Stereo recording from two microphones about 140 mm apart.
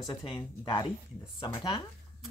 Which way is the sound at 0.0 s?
30° left (ahead or behind).